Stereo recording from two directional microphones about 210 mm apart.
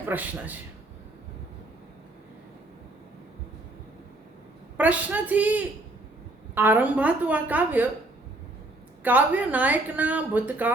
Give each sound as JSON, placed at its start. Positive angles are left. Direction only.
{"t": 0.0, "sound": "speech", "side_deg": -10}
{"t": 4.8, "sound": "speech", "side_deg": -10}
{"t": 9.0, "sound": "speech", "side_deg": -5}